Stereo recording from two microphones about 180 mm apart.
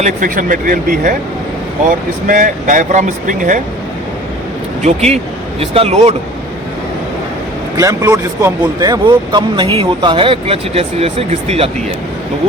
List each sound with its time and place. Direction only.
0.0 s speech: 50° right (ahead or behind)
2.2 s speech: 50° right (ahead or behind)
4.9 s speech: 35° right (ahead or behind)
7.8 s speech: 20° right (ahead or behind); by 11.7 s 35° right (ahead or behind)